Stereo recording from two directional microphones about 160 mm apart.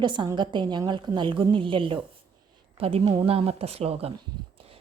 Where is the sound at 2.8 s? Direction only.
40° right (ahead or behind).